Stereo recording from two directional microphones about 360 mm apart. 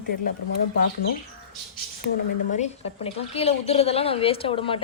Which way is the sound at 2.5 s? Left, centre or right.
Centre.